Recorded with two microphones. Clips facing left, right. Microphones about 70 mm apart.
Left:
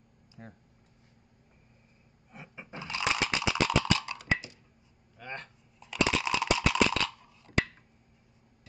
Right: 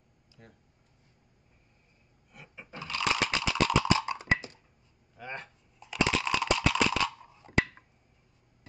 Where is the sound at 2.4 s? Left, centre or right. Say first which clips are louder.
Even; centre.